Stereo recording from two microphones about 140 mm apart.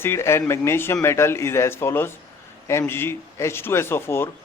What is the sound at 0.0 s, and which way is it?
A man's voice, 20° left (ahead or behind).